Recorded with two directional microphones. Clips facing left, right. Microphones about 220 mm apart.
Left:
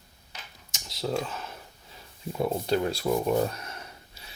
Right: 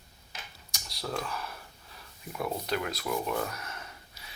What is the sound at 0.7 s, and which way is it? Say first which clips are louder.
Computer keyboard: left 6 dB; 25° left (ahead or behind).